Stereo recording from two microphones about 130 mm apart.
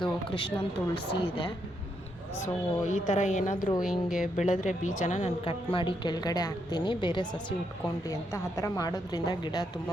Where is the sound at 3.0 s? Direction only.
65° left (ahead or behind).